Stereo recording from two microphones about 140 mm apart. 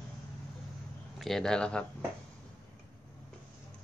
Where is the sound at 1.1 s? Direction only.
Centre (ahead or behind).